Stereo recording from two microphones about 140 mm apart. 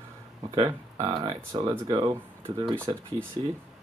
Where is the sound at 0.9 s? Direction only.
30° right (ahead or behind).